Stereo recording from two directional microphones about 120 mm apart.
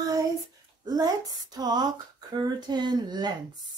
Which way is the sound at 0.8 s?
35° right (ahead or behind).